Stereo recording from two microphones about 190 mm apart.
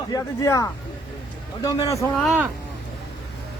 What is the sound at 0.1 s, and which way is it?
Speech, 15° left (ahead or behind).